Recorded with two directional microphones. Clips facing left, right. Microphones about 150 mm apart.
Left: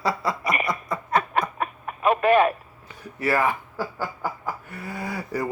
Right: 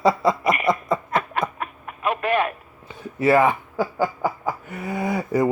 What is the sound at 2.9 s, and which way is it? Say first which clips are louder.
Speech: right 7 dB; 20° right (ahead or behind).